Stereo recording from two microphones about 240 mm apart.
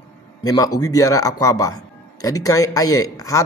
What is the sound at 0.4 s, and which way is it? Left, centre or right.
A man's voice, centre.